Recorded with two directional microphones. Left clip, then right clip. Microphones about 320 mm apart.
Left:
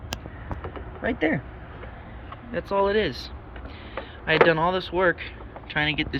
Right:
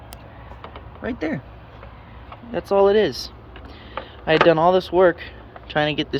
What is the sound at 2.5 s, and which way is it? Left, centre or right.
Speech, right.